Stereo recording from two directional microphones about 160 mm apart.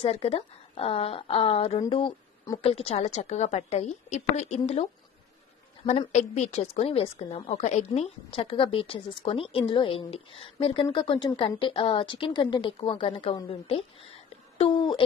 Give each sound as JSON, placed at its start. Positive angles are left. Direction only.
{"t": 0.0, "sound": "a woman's voice", "side_deg": 40}
{"t": 5.9, "sound": "a woman's voice", "side_deg": 45}